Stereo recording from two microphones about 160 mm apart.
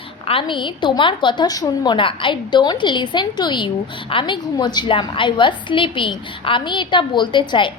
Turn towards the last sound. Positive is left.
turn(degrees=30)  # may be behind; listen again after turning